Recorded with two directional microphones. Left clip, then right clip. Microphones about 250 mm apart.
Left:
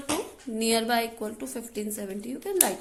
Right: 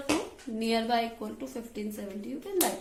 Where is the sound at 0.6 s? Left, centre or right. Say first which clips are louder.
Left 3 dB; left.